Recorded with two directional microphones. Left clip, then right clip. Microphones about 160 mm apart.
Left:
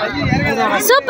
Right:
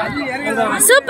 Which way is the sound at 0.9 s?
15° right (ahead or behind).